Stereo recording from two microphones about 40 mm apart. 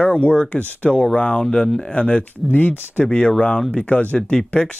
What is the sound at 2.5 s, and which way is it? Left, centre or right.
Speech, left.